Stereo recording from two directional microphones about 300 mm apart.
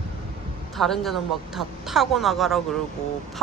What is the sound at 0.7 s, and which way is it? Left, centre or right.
Speech, centre.